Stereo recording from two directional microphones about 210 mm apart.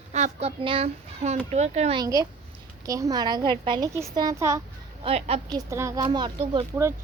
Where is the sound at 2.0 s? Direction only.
15° right (ahead or behind).